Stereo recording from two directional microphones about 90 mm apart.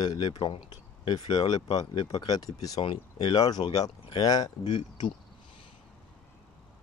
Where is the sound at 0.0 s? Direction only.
50° left (ahead or behind).